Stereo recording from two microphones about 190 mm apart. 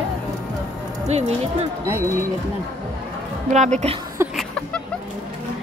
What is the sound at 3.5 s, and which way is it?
Speech, 35° right (ahead or behind).